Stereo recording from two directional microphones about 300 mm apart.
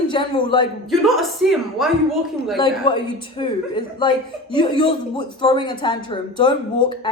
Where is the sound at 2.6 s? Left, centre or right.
Centre.